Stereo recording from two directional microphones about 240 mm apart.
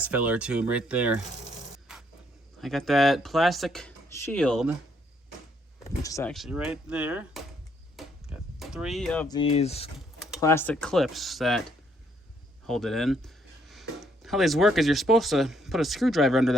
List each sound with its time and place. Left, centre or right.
0.0 s speech: centre
1.9 s a sound: centre
2.6 s speech: centre
5.8 s speech: centre
6.3 s speech: centre
7.9 s a sound: centre
9.3 s speech: left
10.4 s speech: centre
12.6 s speech: centre